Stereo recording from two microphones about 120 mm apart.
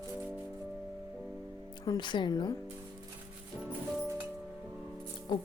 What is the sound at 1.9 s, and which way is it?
Speech, 40° left (ahead or behind).